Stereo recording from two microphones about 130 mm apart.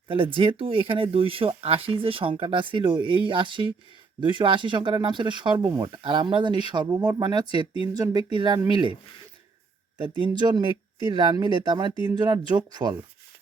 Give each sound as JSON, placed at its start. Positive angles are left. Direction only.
{"t": 0.1, "sound": "speech", "side_deg": -45}
{"t": 10.0, "sound": "speech", "side_deg": -40}